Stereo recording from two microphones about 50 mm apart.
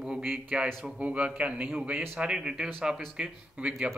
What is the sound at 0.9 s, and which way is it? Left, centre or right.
Speech, right.